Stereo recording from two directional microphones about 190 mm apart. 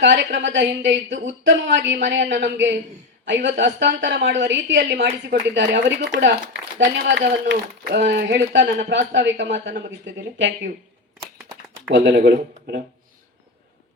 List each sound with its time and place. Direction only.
0.0 s a man's voice: 70° right (ahead or behind)
11.9 s speech: 70° right (ahead or behind)